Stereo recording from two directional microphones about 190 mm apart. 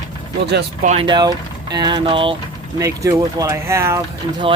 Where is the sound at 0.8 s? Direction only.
40° right (ahead or behind).